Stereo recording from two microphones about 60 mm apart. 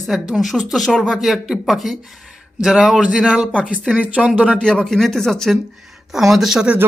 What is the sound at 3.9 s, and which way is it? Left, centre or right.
Speech, right.